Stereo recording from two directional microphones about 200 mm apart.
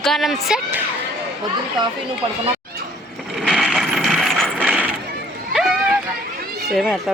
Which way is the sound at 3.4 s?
Centre (ahead or behind).